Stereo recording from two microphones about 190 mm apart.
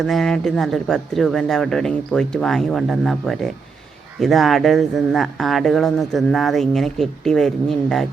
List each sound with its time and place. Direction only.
0.0 s speech: centre (ahead or behind)